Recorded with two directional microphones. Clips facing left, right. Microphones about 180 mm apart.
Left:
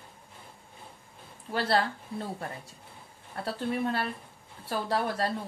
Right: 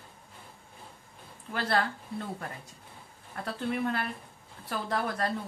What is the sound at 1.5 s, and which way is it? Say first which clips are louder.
A woman's voice: left 2 dB; 30° left (ahead or behind).